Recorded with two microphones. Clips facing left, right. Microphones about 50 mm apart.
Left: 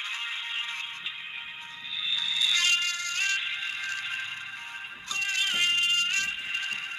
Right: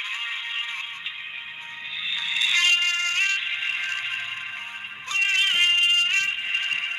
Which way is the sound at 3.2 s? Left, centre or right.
Right.